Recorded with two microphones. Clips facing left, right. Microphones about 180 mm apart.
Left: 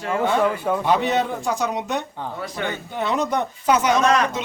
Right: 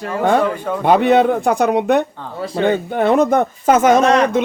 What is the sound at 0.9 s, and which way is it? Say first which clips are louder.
Speech: right 10 dB; 60° right (ahead or behind).